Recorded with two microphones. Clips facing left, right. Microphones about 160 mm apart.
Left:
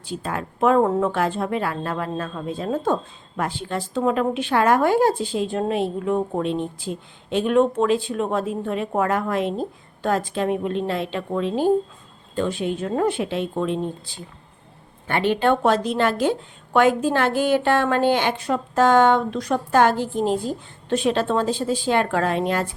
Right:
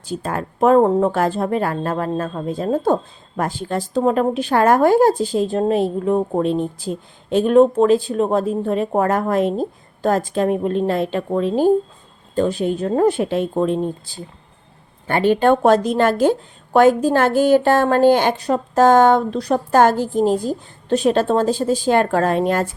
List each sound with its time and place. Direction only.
0.0 s speech: 40° right (ahead or behind)